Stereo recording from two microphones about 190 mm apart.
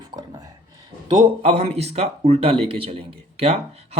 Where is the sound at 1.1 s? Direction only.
30° right (ahead or behind).